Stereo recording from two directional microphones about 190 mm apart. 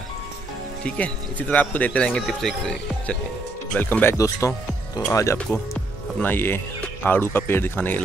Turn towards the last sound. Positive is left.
turn(degrees=10)  # may be behind; listen again after turning